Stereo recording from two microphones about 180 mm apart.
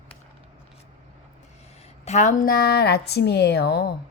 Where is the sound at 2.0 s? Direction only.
45° left (ahead or behind); by 3.9 s 65° left (ahead or behind).